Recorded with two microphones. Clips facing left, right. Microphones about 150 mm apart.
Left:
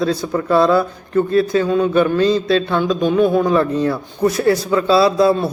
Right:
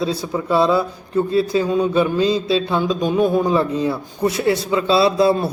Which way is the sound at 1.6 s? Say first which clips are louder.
Left 2 dB; 15° right (ahead or behind).